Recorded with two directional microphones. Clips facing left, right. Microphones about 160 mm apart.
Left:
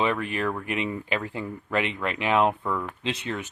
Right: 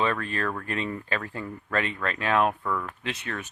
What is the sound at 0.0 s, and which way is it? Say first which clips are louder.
Speech: left 2 dB; 15° left (ahead or behind).